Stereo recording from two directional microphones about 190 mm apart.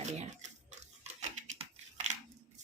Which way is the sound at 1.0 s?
40° right (ahead or behind).